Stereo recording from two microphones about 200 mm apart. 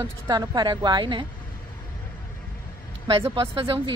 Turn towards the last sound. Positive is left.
turn(degrees=-25)  # may be behind; listen again after turning